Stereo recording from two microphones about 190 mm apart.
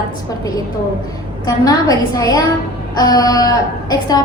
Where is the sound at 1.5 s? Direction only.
20° left (ahead or behind).